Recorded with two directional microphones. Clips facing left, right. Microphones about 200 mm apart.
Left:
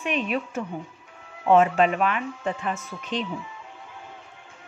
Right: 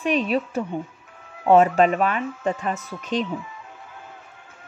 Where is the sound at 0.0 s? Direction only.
35° right (ahead or behind).